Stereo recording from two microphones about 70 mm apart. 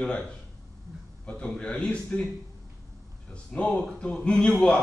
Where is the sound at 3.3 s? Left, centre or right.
Centre.